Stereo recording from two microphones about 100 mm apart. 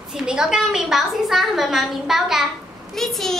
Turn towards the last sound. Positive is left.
turn(degrees=0)  # may be behind; listen again after turning